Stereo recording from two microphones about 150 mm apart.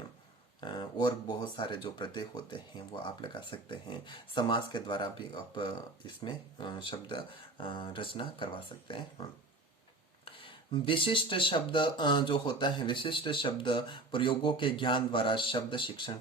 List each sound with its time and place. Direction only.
0.6 s speech: 30° left (ahead or behind)
10.2 s speech: 35° left (ahead or behind)